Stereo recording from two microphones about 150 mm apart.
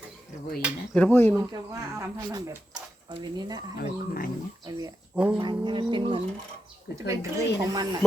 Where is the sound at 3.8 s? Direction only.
70° left (ahead or behind).